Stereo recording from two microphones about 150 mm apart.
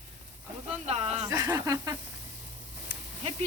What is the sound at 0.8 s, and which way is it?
Speech, 45° right (ahead or behind).